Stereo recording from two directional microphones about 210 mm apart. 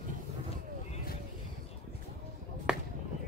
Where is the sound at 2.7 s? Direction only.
5° right (ahead or behind).